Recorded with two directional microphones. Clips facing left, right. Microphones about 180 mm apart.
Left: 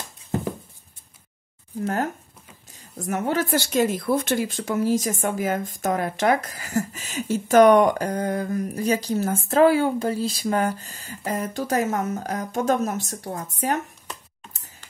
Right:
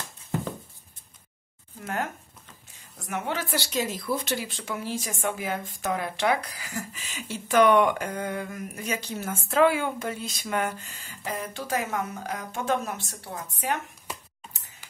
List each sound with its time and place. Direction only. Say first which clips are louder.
3.0 s speech: left 7 dB; 40° left (ahead or behind)